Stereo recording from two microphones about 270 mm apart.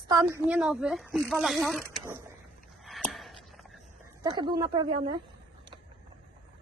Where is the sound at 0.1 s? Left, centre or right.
Centre.